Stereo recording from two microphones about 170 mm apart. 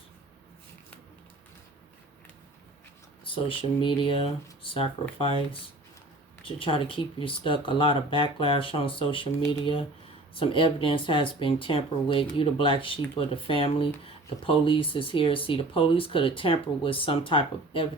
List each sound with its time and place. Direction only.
3.3 s speech: 30° left (ahead or behind)
6.6 s speech: 30° left (ahead or behind)
10.3 s speech: 30° left (ahead or behind)